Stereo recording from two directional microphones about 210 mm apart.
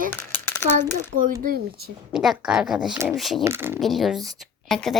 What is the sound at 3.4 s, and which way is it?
Speech, 10° right (ahead or behind).